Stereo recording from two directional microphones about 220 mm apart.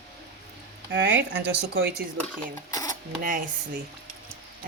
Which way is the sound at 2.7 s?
15° left (ahead or behind).